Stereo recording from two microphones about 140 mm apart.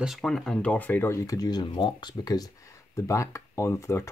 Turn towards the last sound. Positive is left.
turn(degrees=20)  # may be behind; listen again after turning